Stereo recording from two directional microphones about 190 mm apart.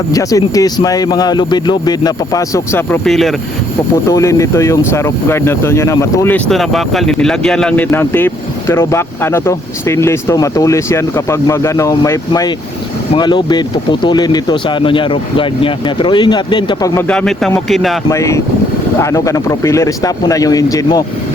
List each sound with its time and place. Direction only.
0.1 s speech: 20° left (ahead or behind); by 3.3 s centre (ahead or behind)
4.1 s speech: 15° left (ahead or behind)
17.1 s speech: 5° left (ahead or behind)
18.1 s speech: 15° left (ahead or behind)